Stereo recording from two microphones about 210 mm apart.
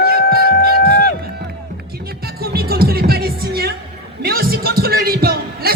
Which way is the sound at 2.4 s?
45° right (ahead or behind).